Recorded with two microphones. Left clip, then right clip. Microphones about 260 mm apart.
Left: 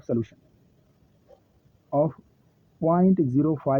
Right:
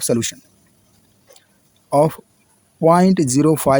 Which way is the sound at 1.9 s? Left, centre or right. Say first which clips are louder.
Right 9 dB; right.